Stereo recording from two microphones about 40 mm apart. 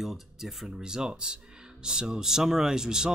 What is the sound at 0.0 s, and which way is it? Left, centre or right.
Speech, centre.